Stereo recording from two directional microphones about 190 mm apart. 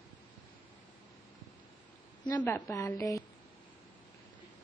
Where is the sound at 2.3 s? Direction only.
10° left (ahead or behind).